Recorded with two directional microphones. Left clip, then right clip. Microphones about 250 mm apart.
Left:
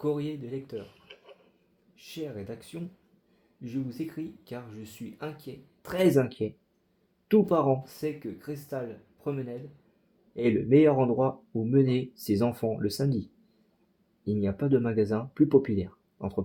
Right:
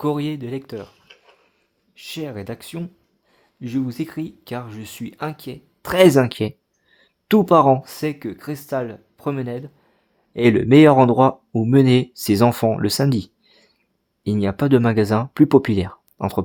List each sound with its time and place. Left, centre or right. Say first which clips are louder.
0.0 s speech: right 8 dB; right
2.0 s speech: right 8 dB; right
14.3 s speech: right 9 dB; right